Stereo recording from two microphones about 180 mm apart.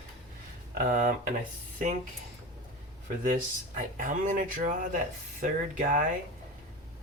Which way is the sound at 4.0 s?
45° right (ahead or behind).